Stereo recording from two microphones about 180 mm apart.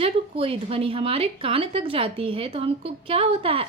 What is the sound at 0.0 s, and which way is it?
A woman's voice, 30° right (ahead or behind).